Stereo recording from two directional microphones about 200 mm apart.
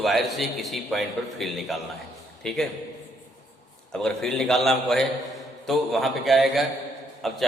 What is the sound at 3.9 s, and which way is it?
A man's voice, 5° left (ahead or behind).